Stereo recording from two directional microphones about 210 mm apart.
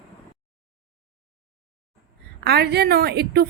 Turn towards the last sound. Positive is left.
turn(degrees=-50)  # may be behind; listen again after turning